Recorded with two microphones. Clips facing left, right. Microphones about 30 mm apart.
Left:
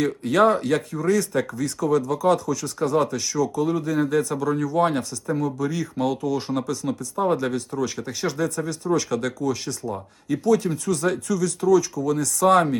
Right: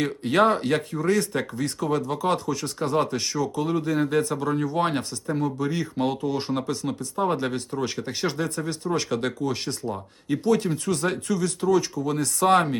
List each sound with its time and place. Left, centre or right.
0.0 s speech: right
3.7 s speech: centre
6.8 s speech: centre
7.3 s speech: right